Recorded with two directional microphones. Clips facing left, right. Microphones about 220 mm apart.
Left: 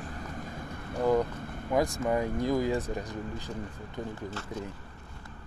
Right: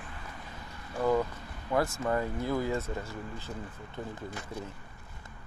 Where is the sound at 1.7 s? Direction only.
15° left (ahead or behind).